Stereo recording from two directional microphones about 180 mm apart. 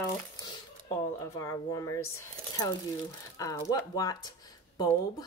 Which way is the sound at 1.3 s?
20° left (ahead or behind).